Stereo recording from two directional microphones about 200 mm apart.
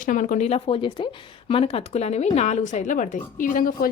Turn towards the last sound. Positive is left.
turn(degrees=45)  # may be behind; listen again after turning